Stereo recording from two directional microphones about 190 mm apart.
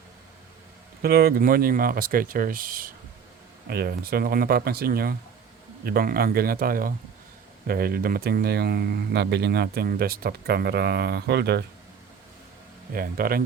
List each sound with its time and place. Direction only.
1.0 s speech: 55° right (ahead or behind)
12.9 s speech: 50° right (ahead or behind)